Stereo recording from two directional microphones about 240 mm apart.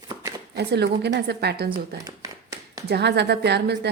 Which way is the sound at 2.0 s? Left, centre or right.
Centre.